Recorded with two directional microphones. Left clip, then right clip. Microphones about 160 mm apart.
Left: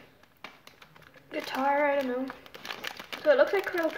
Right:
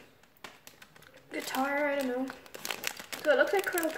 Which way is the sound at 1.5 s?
5° right (ahead or behind).